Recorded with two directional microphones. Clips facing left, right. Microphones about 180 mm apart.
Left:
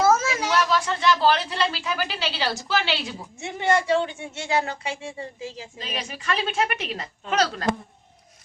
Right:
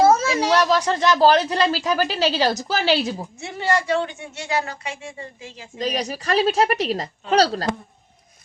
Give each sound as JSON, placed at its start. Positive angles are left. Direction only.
{"t": 0.0, "sound": "speech", "side_deg": -30}
{"t": 3.6, "sound": "a man's voice", "side_deg": 25}
{"t": 5.8, "sound": "a woman's voice", "side_deg": -40}